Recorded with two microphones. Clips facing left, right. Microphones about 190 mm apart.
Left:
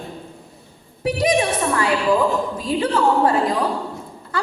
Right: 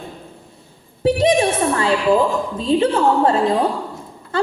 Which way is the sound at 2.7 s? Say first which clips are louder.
Right 3 dB; 25° right (ahead or behind).